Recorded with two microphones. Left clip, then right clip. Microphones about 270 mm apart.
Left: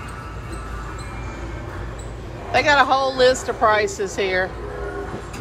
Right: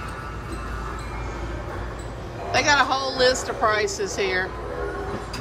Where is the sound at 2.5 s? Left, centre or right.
Centre.